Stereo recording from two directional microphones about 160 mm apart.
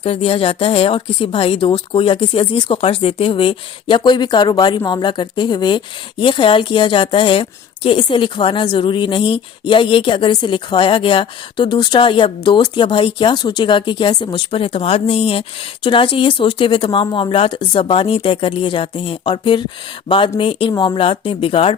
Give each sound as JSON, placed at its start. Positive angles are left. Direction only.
{"t": 0.0, "sound": "a woman's voice", "side_deg": 35}